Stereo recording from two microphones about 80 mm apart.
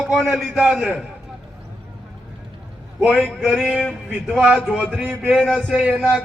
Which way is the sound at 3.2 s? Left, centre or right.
Centre.